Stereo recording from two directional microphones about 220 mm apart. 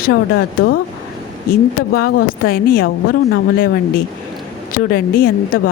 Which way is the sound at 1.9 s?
45° left (ahead or behind).